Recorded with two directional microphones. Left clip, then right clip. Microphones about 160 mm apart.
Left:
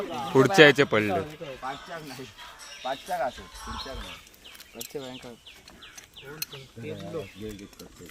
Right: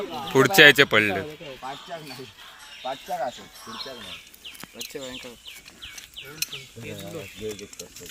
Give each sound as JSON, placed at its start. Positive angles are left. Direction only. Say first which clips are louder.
{"t": 0.0, "sound": "speech", "louder": "right 2 dB", "side_deg": 10}
{"t": 1.6, "sound": "speech", "louder": "right 1 dB", "side_deg": -20}
{"t": 4.9, "sound": "speech", "louder": "right 1 dB", "side_deg": 45}